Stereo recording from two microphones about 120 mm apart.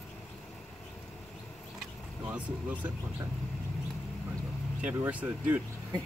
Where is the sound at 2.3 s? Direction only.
10° right (ahead or behind).